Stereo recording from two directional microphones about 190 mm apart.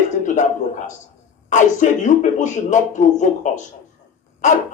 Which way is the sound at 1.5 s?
40° left (ahead or behind).